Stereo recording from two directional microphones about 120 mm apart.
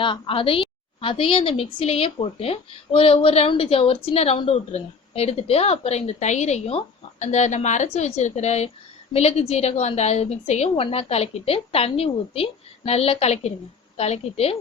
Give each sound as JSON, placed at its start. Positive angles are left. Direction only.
{"t": 0.0, "sound": "a woman's voice", "side_deg": 45}